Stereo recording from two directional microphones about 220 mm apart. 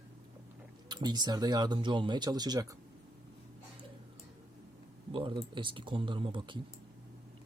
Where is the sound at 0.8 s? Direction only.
20° right (ahead or behind).